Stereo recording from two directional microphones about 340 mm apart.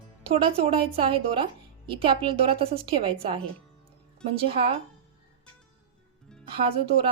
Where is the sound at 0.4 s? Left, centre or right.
Centre.